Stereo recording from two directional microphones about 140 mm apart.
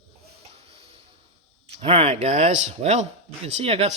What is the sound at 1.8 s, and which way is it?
Speech, 45° right (ahead or behind).